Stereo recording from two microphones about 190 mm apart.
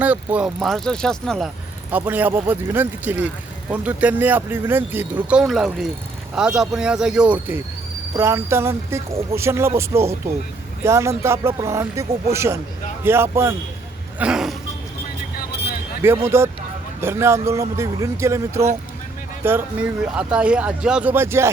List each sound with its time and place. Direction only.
0.0 s speech: 10° right (ahead or behind)
1.9 s speech: 10° right (ahead or behind)
14.2 s a sound: 5° right (ahead or behind)
15.4 s vehicle: 60° left (ahead or behind)
16.2 s speech: 15° right (ahead or behind)